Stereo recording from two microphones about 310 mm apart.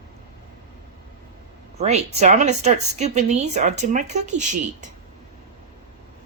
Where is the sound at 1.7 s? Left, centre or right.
Right.